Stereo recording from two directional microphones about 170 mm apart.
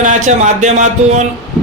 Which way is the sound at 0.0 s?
45° right (ahead or behind).